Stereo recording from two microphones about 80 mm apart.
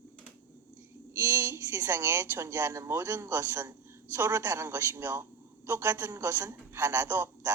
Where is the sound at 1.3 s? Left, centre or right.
Right.